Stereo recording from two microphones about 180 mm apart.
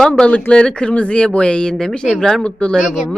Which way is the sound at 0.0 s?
5° left (ahead or behind).